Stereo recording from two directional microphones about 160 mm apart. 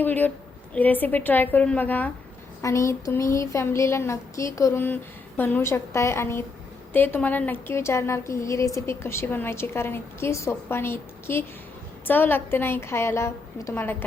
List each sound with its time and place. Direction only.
0.0 s a woman's voice: 10° left (ahead or behind)
2.6 s a sound: 20° left (ahead or behind)
5.4 s a woman's voice: 15° left (ahead or behind)